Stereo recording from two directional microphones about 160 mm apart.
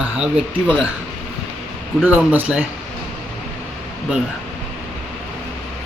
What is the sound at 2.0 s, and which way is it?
Speech, 10° right (ahead or behind).